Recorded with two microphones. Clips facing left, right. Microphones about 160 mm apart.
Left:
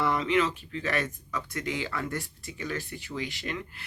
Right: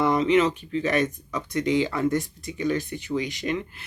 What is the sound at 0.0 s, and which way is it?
Speech, 20° right (ahead or behind).